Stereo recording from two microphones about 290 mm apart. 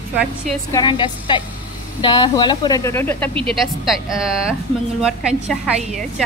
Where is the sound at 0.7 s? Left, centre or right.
Centre.